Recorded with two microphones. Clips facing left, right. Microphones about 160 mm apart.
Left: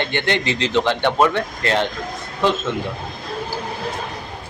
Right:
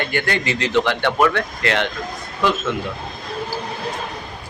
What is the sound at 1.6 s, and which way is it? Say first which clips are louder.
Speech: left 1 dB; 30° left (ahead or behind).